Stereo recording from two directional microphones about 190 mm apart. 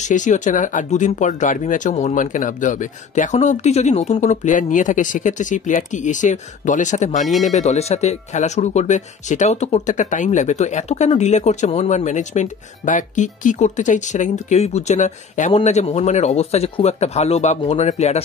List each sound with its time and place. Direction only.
0.0 s speech: 40° left (ahead or behind)